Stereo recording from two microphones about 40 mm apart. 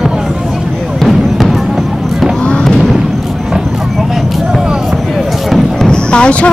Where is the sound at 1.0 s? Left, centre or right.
Centre.